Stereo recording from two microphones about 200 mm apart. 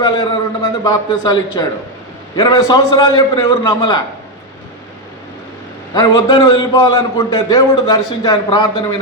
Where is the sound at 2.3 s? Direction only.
20° left (ahead or behind).